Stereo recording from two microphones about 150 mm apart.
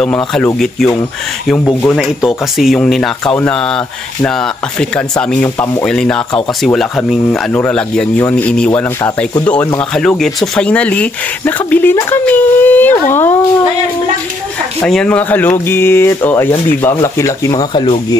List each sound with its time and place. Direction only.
0.0 s speech: 5° left (ahead or behind)
1.6 s speech: 15° left (ahead or behind)
1.9 s speech: 5° right (ahead or behind); by 13.5 s 15° left (ahead or behind)
14.9 s speech: 5° left (ahead or behind); by 17.8 s 25° left (ahead or behind)